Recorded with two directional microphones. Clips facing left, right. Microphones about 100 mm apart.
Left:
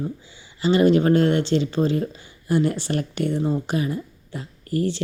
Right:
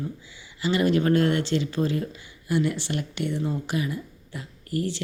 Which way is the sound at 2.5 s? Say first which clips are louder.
Left 4 dB; 40° left (ahead or behind).